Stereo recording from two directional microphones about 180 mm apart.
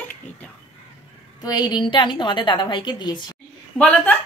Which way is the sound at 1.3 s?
20° left (ahead or behind).